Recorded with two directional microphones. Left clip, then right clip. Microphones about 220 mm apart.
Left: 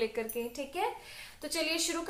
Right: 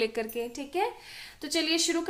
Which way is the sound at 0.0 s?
50° right (ahead or behind).